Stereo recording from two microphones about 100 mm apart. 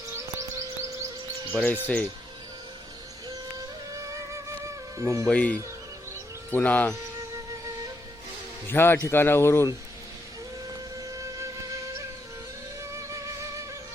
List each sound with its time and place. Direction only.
1.5 s speech: 15° left (ahead or behind)
3.9 s music: 30° right (ahead or behind)
5.3 s speech: 10° left (ahead or behind)
8.6 s speech: 20° left (ahead or behind)
10.7 s music: 35° right (ahead or behind)
12.8 s music: 30° right (ahead or behind)